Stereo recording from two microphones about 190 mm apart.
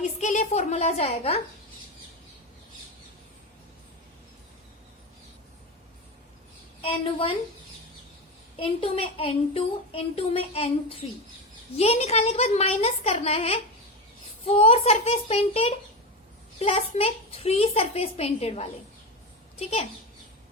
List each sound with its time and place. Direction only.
0.0 s a child's voice: 40° left (ahead or behind)
6.8 s a woman's voice: 30° left (ahead or behind)
8.5 s a woman's voice: 30° left (ahead or behind)